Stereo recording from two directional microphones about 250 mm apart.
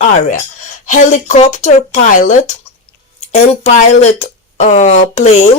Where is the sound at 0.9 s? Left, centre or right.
Left.